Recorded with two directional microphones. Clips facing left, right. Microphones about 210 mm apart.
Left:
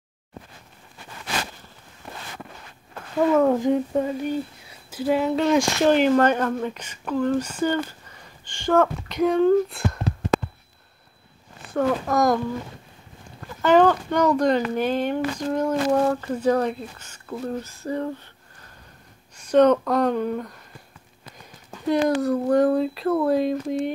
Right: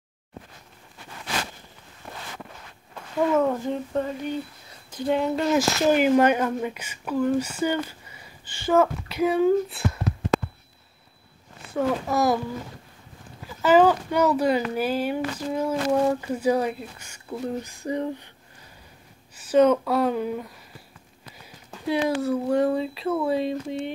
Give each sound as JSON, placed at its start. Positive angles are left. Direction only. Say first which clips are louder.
{"t": 3.4, "sound": "a sound", "louder": "left 6 dB", "side_deg": 15}
{"t": 4.9, "sound": "speech", "louder": "left 2 dB", "side_deg": 5}
{"t": 10.1, "sound": "a sound", "louder": "left 1 dB", "side_deg": 30}
{"t": 11.7, "sound": "speech", "louder": "left 2 dB", "side_deg": -5}
{"t": 13.4, "sound": "speech", "louder": "left 1 dB", "side_deg": -5}
{"t": 19.3, "sound": "speech", "louder": "left 2 dB", "side_deg": -5}
{"t": 21.8, "sound": "speech", "louder": "left 3 dB", "side_deg": -5}